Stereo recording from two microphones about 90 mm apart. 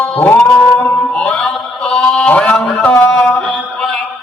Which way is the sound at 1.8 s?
10° left (ahead or behind).